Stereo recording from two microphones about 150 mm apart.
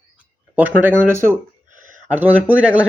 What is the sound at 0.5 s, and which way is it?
Speech, 10° right (ahead or behind).